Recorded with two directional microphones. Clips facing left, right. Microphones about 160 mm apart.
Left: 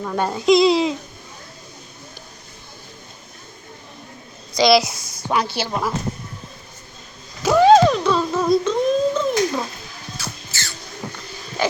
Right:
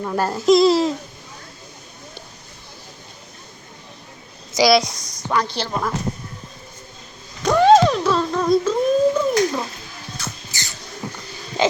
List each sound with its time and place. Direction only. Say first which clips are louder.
0.0 s a child's voice: right 1 dB; 5° right (ahead or behind)
4.6 s a child's voice: even; 5° left (ahead or behind)
7.4 s humming: left 1 dB; centre (ahead or behind)
10.5 s a sound: left 1 dB; 15° right (ahead or behind)